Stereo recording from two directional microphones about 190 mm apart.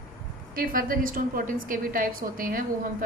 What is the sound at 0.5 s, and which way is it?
A woman's voice, 45° right (ahead or behind).